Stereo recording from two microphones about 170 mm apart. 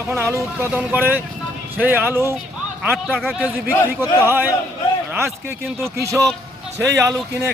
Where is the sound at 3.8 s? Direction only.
20° left (ahead or behind).